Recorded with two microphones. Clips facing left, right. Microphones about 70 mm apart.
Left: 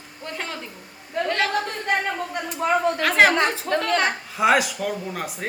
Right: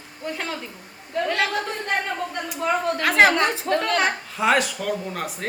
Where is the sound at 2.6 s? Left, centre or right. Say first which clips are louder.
Left 2 dB; left.